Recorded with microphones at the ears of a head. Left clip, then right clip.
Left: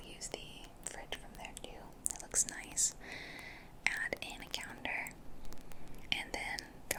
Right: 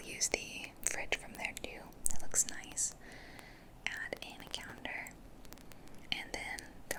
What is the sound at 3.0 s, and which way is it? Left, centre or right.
Whispering, left.